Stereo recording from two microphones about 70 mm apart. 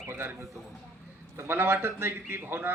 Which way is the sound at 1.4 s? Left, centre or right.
Right.